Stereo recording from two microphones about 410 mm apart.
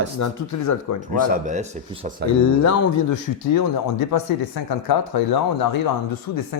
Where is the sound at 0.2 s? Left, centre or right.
Left.